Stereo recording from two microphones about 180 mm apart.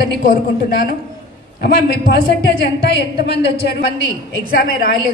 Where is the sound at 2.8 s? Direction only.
65° left (ahead or behind).